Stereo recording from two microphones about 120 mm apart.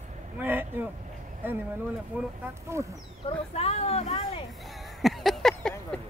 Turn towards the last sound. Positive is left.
turn(degrees=5)  # may be behind; listen again after turning